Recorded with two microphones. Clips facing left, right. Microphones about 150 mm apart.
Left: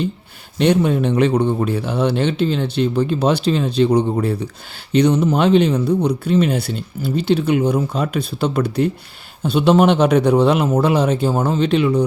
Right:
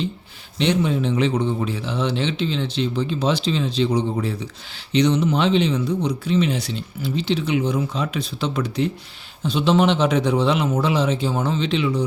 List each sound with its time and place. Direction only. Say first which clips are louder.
0.6 s speech: left 5 dB; 55° left (ahead or behind)